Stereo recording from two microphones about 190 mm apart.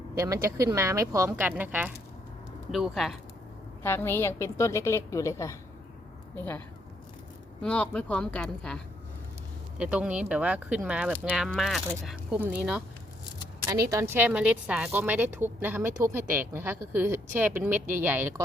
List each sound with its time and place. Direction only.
0.2 s speech: 15° right (ahead or behind); by 3.2 s centre (ahead or behind)
3.8 s a woman's voice: 10° left (ahead or behind)
7.6 s a woman's voice: 5° left (ahead or behind)
13.4 s speech: 15° right (ahead or behind)